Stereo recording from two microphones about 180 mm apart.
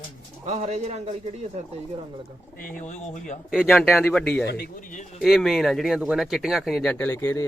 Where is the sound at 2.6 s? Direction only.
50° left (ahead or behind).